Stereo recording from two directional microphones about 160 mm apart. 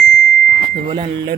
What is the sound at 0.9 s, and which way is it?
Speech, 30° right (ahead or behind).